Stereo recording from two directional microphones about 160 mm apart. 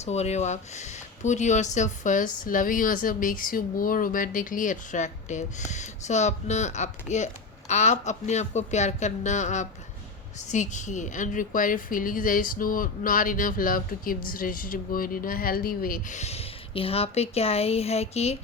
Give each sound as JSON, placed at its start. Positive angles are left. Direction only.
{"t": 0.0, "sound": "a woman's voice", "side_deg": 45}